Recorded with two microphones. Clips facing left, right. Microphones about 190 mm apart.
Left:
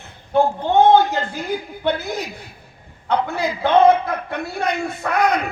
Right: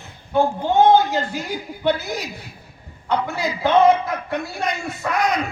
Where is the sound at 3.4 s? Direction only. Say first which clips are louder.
Left 1 dB; 60° left (ahead or behind).